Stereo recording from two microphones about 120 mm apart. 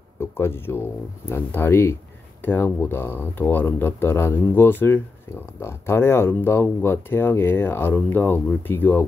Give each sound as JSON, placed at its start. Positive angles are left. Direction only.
{"t": 0.2, "sound": "speech", "side_deg": 20}